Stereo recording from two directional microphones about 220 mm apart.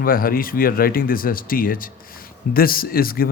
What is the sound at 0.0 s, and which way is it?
Speech, 40° left (ahead or behind).